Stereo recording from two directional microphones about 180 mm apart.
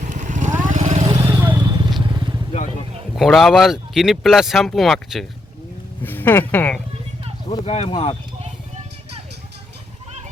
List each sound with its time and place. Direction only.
0.0 s vehicle: 45° right (ahead or behind)
1.0 s vehicle: 25° right (ahead or behind)
1.3 s vehicle: 10° right (ahead or behind)
2.0 s vehicle: 25° right (ahead or behind)
3.2 s speech: centre (ahead or behind)
6.0 s speech: 10° left (ahead or behind)
7.5 s speech: 35° left (ahead or behind)